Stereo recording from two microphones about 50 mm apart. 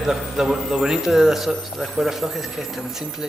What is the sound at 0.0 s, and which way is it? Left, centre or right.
A man's voice, centre.